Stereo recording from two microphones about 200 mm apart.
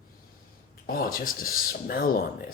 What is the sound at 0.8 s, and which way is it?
Speech, 45° left (ahead or behind).